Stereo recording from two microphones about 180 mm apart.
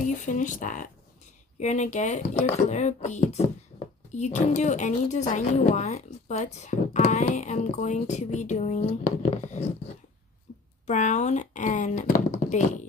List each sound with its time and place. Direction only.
0.0 s a woman's voice: 45° left (ahead or behind)
3.7 s a sound: 30° left (ahead or behind)
4.2 s a woman's voice: 40° left (ahead or behind)
10.9 s speech: 40° left (ahead or behind)